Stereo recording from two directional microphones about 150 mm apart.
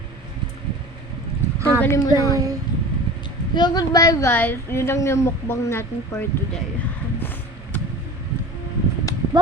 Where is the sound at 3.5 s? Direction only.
30° left (ahead or behind).